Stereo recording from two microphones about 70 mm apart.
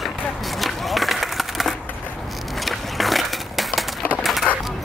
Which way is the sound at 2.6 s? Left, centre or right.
Centre.